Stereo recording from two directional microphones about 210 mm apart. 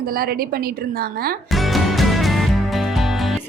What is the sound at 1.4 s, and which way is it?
Music, centre (ahead or behind).